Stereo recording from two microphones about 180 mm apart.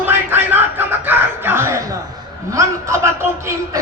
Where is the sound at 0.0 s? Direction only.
10° right (ahead or behind).